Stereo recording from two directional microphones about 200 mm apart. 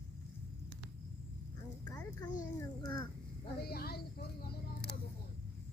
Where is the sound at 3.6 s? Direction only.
50° left (ahead or behind).